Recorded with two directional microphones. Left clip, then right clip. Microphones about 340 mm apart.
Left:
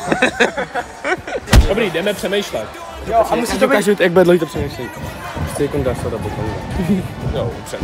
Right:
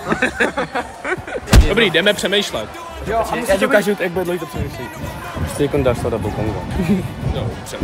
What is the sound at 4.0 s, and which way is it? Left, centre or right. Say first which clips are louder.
Speech: left 9 dB; centre.